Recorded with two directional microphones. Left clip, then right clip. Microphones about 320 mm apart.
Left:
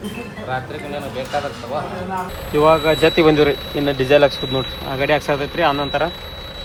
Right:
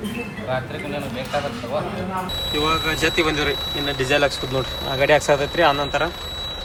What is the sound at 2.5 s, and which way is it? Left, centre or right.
Speech, centre.